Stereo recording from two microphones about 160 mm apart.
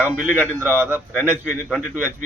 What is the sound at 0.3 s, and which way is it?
A man's voice, 10° right (ahead or behind).